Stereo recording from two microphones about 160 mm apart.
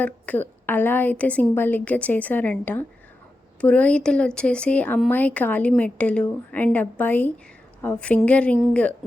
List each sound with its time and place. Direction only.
0.0 s a woman's voice: 10° left (ahead or behind)